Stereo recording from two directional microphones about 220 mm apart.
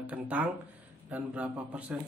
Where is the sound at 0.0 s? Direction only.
5° right (ahead or behind).